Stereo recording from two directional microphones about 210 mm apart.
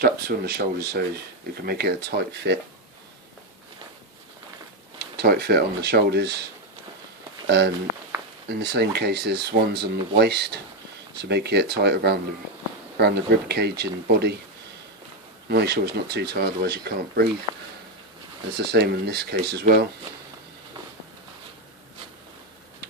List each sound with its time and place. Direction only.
0.0 s speech: 50° right (ahead or behind)
4.9 s speech: 50° right (ahead or behind)
15.4 s speech: 50° right (ahead or behind)
18.5 s speech: 50° right (ahead or behind)